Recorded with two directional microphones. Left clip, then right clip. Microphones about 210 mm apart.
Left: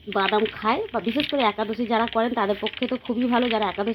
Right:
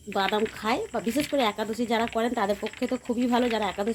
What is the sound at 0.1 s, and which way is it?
Speech, 20° left (ahead or behind).